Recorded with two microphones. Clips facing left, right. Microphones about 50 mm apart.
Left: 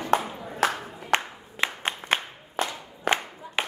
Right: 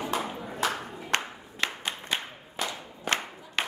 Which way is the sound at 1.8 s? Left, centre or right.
Left.